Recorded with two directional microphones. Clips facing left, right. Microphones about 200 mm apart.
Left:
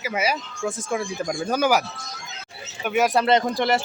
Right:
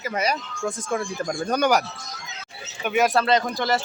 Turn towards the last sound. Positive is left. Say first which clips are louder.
# left 2 dB
turn(degrees=25)  # may be behind; listen again after turning